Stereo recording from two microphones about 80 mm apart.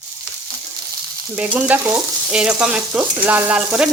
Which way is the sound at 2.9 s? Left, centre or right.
Right.